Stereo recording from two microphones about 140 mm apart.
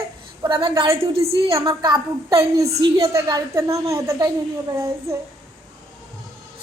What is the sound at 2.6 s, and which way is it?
Speech, 50° right (ahead or behind).